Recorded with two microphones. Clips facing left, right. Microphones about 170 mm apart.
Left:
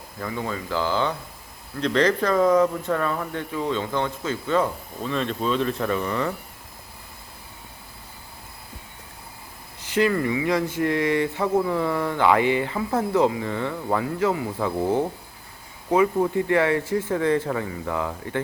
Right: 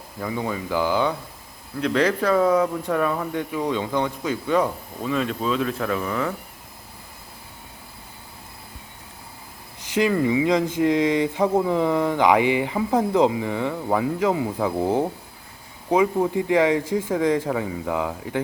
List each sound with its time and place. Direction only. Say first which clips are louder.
0.2 s speech: right 2 dB; 15° right (ahead or behind)
9.9 s speech: right 2 dB; 15° right (ahead or behind)